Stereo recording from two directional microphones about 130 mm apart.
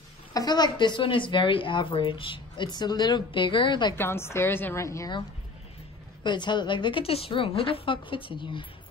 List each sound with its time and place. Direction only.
0.3 s a woman's voice: 30° left (ahead or behind)
3.9 s a woman's voice: 20° left (ahead or behind)
6.2 s a woman's voice: 35° left (ahead or behind)